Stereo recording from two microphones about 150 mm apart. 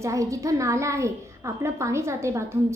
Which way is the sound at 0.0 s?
20° right (ahead or behind).